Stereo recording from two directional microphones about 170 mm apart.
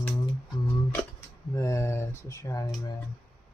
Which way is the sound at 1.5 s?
15° left (ahead or behind).